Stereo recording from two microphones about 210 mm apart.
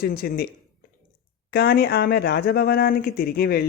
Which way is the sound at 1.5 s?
50° left (ahead or behind).